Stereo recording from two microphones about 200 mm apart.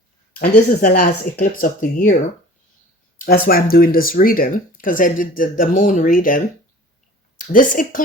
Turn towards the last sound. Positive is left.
turn(degrees=40)  # may be behind; listen again after turning